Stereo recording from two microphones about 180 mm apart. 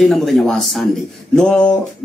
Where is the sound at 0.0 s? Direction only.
Centre (ahead or behind).